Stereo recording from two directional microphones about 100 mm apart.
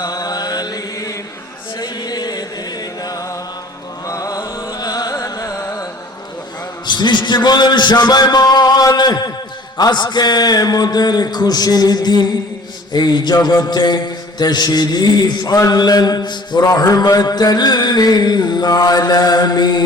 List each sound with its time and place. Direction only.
0.0 s mantra: 40° left (ahead or behind)
1.8 s music: 40° left (ahead or behind)
6.8 s a sound: 50° left (ahead or behind)